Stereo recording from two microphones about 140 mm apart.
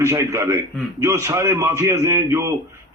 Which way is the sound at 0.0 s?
20° right (ahead or behind).